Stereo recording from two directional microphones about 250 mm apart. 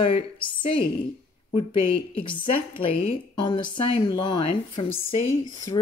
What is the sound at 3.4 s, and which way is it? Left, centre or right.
Speech, centre.